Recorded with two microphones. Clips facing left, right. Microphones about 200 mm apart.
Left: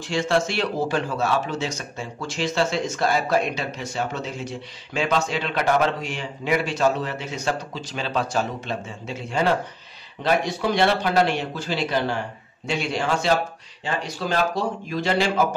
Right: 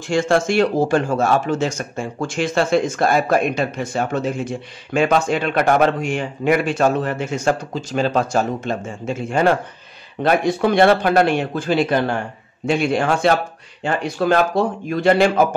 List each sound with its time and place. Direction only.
0.0 s a man's voice: 50° right (ahead or behind)